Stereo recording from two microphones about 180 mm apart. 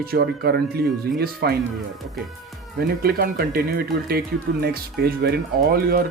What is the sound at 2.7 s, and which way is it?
Speech, 55° right (ahead or behind).